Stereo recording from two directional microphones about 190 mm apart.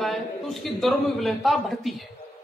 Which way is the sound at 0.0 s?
Centre (ahead or behind).